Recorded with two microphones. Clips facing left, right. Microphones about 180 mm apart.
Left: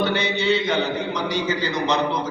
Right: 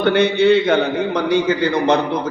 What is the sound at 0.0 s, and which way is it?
Mantra, 55° right (ahead or behind).